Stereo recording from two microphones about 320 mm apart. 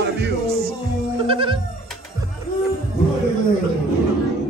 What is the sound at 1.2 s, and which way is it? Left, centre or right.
Speech, centre.